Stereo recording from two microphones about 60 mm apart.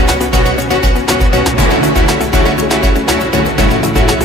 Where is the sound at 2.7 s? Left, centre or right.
Centre.